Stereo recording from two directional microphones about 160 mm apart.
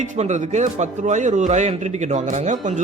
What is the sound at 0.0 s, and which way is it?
A man's voice, 50° right (ahead or behind).